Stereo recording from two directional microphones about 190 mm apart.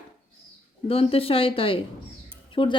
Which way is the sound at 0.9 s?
30° left (ahead or behind).